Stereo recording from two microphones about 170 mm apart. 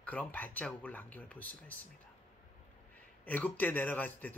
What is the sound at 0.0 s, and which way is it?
A man's voice, 10° left (ahead or behind).